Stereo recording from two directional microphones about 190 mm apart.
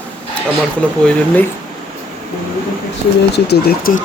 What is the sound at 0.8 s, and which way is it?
Speech, 5° left (ahead or behind).